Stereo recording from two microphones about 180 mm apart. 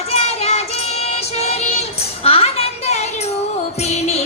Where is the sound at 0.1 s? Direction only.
35° left (ahead or behind).